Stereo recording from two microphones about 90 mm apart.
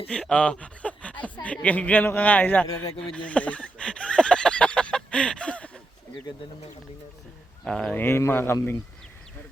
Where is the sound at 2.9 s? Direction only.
15° left (ahead or behind).